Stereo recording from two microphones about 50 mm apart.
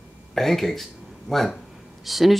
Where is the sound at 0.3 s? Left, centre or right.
Centre.